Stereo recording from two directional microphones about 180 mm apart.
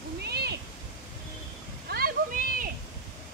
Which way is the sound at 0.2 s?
65° right (ahead or behind).